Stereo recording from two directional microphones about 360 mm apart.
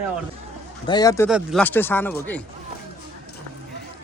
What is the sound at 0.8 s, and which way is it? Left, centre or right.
A man's voice, centre.